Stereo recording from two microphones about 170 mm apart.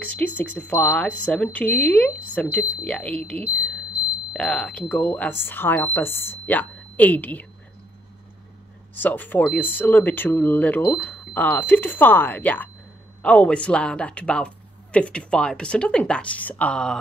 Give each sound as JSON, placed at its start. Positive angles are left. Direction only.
{"t": 0.0, "sound": "speech", "side_deg": 10}
{"t": 8.9, "sound": "speech", "side_deg": 10}